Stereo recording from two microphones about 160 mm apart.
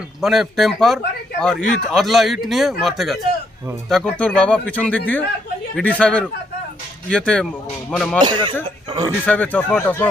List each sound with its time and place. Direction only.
0.2 s speech: centre (ahead or behind)
8.2 s speech: 30° right (ahead or behind)
9.2 s speech: 10° left (ahead or behind)